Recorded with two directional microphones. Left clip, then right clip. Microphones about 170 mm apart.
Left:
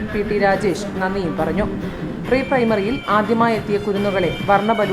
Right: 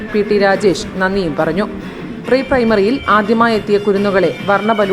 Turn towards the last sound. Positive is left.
turn(degrees=-25)  # may be behind; listen again after turning